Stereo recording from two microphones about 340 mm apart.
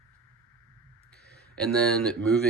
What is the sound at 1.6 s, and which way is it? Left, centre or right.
Speech, centre.